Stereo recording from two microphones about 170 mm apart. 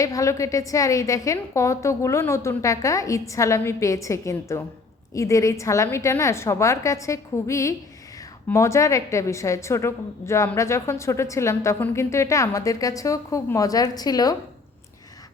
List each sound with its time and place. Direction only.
0.0 s a woman's voice: 20° left (ahead or behind)